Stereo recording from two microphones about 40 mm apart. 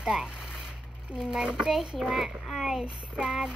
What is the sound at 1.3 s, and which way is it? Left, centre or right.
Speech, right.